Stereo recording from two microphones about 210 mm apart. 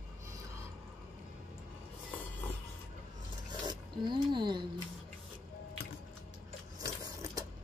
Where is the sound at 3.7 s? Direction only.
20° right (ahead or behind).